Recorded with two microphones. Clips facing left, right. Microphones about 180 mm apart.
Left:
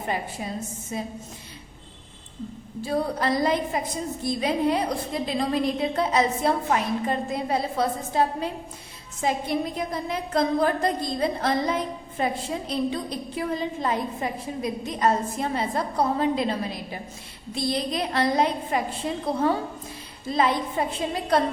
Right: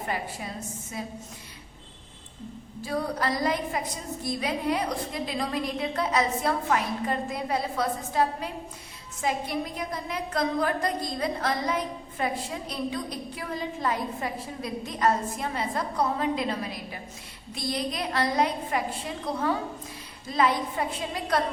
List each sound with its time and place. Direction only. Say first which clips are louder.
0.1 s a woman's voice: left 5 dB; 25° left (ahead or behind)
2.8 s a woman's voice: left 3 dB; 25° left (ahead or behind)